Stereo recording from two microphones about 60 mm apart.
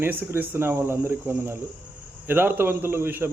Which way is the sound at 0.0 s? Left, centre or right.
Right.